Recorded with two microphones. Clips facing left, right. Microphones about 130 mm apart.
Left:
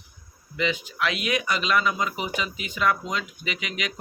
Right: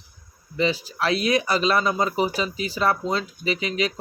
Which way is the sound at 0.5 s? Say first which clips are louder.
Right 3 dB; 35° right (ahead or behind).